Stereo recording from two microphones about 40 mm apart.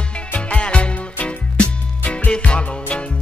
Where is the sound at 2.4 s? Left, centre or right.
Left.